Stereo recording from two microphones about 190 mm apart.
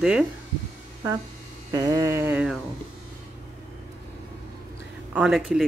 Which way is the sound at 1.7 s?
15° right (ahead or behind).